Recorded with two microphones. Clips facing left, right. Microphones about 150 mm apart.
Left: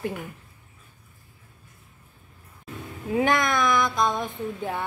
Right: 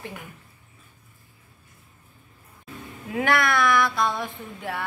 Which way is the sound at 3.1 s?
20° left (ahead or behind).